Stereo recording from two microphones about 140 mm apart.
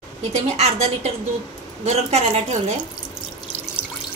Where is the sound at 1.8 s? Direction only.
50° right (ahead or behind).